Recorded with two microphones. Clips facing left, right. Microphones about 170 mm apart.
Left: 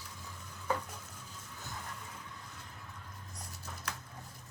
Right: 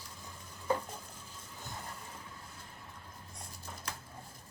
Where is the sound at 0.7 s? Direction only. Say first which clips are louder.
Right 2 dB; 30° right (ahead or behind).